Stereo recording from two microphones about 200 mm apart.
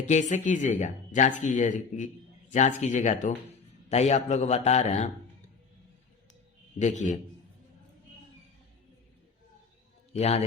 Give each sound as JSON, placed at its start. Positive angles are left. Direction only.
{"t": 0.0, "sound": "speech", "side_deg": 35}
{"t": 6.7, "sound": "speech", "side_deg": 35}
{"t": 10.1, "sound": "a man's voice", "side_deg": 30}